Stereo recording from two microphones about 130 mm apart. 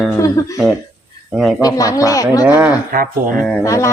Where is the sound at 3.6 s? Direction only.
25° left (ahead or behind).